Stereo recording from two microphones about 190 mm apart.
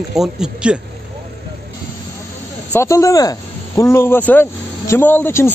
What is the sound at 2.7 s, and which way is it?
Speech, 15° left (ahead or behind).